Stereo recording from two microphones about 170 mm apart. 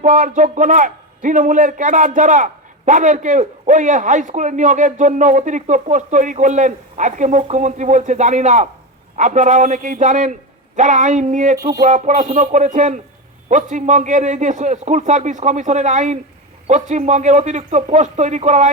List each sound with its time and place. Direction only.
0.0 s a man's voice: 50° right (ahead or behind)